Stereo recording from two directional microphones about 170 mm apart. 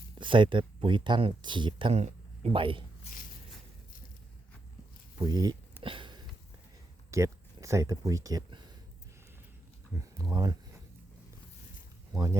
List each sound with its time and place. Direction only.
0.2 s speech: 30° right (ahead or behind)
5.1 s speech: 25° right (ahead or behind)
5.8 s a sound: 30° right (ahead or behind)
7.1 s speech: 15° right (ahead or behind)
10.2 s speech: 20° right (ahead or behind)
12.1 s speech: 20° right (ahead or behind)